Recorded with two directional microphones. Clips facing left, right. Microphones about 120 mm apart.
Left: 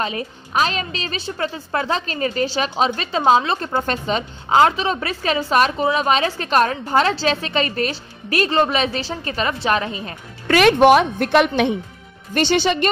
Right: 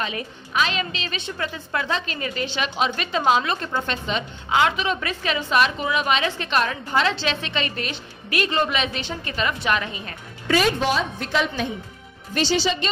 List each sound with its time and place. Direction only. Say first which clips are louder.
0.0 s a woman's voice: left 4 dB; 40° left (ahead or behind)
3.6 s a woman's voice: left 5 dB; 45° left (ahead or behind)
10.5 s a woman's voice: left 9 dB; 65° left (ahead or behind)